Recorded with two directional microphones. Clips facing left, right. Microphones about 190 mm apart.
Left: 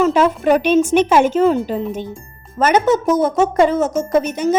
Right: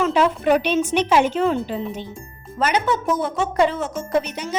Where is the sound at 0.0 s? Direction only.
45° left (ahead or behind).